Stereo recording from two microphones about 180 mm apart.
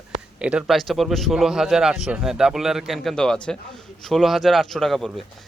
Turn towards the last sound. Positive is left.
turn(degrees=0)  # may be behind; listen again after turning